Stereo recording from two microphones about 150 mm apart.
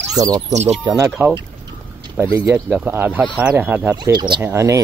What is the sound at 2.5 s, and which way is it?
Speech, 10° right (ahead or behind).